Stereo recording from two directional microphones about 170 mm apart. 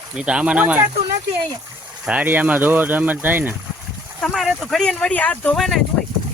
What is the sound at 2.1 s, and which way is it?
Speech, 10° right (ahead or behind).